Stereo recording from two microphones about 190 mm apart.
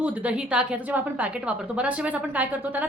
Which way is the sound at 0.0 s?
5° right (ahead or behind).